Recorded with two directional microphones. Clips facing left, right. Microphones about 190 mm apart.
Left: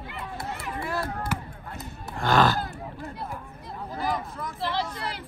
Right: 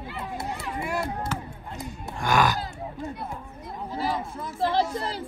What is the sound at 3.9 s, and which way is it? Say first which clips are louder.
Speech: right 1 dB; 25° right (ahead or behind).